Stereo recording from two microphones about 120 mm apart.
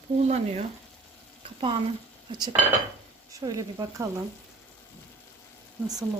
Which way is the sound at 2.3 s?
35° right (ahead or behind).